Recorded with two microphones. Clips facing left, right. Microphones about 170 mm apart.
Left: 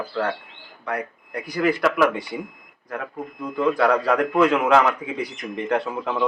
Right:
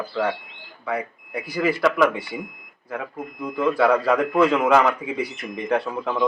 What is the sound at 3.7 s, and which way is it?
Speech, 5° right (ahead or behind).